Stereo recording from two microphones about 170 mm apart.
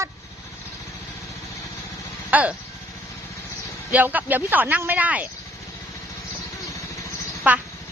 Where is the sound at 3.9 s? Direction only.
10° right (ahead or behind).